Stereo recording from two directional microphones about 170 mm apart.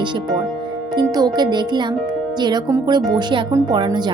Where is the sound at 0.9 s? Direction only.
25° right (ahead or behind).